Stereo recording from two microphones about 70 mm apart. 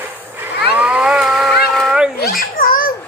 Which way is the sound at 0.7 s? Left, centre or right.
Centre.